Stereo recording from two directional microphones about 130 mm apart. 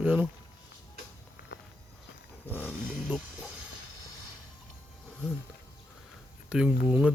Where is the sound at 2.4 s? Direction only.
15° left (ahead or behind).